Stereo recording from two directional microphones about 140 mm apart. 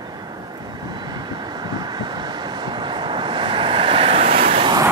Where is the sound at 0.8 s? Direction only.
30° right (ahead or behind).